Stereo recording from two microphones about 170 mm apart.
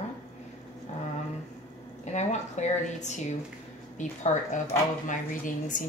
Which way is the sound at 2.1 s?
40° left (ahead or behind).